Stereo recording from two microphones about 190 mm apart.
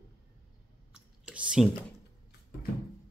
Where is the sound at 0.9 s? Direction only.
5° right (ahead or behind).